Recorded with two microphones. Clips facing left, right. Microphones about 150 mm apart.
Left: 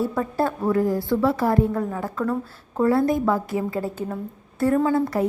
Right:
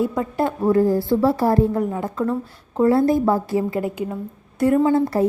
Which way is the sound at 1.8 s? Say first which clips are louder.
Right 3 dB; 20° right (ahead or behind).